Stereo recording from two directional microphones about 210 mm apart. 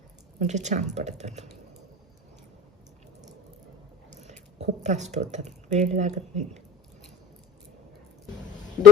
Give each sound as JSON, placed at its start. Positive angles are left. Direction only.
{"t": 0.3, "sound": "speech", "side_deg": -35}
{"t": 4.2, "sound": "speech", "side_deg": -30}